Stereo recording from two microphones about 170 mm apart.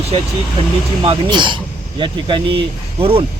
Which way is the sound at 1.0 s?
30° right (ahead or behind).